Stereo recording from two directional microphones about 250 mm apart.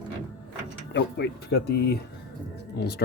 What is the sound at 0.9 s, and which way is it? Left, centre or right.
Speech, left.